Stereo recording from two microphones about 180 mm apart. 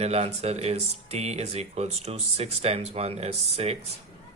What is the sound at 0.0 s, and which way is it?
Speech, 35° right (ahead or behind).